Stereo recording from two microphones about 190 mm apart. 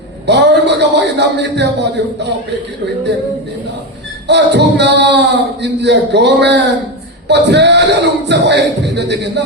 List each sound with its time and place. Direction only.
0.3 s speech: 65° right (ahead or behind)
4.3 s speech: 65° right (ahead or behind)